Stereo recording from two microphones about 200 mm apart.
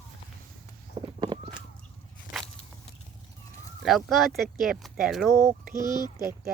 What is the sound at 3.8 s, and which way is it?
Speech, centre (ahead or behind).